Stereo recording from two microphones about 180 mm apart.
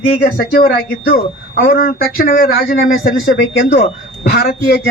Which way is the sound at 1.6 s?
55° left (ahead or behind).